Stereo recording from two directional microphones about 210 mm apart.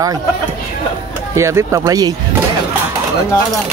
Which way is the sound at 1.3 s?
15° right (ahead or behind).